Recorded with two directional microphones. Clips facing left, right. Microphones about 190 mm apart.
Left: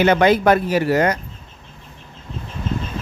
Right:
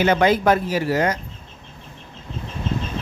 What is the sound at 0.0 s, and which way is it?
Speech, 65° left (ahead or behind).